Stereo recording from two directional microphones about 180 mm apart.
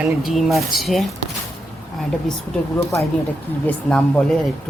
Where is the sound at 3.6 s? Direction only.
5° left (ahead or behind).